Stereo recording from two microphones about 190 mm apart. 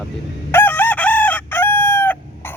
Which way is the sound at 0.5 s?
10° left (ahead or behind).